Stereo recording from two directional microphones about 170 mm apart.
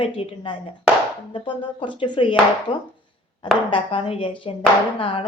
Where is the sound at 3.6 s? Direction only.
30° left (ahead or behind).